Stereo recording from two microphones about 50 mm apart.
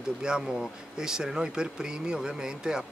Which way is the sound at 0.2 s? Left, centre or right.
Centre.